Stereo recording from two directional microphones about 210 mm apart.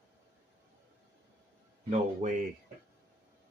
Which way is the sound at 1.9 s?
35° right (ahead or behind).